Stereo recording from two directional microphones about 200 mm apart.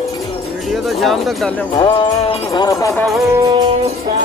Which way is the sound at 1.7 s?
20° left (ahead or behind).